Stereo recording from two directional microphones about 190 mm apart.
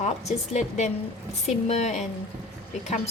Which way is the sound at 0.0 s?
35° left (ahead or behind).